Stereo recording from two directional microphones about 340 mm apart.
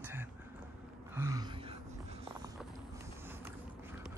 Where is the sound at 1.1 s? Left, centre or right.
Centre.